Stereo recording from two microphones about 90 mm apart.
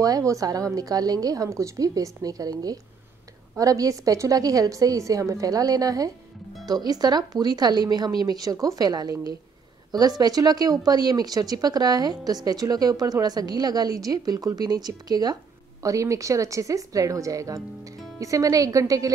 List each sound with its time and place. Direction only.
0.0 s a woman's voice: 40° right (ahead or behind)
3.5 s a woman's voice: 40° right (ahead or behind)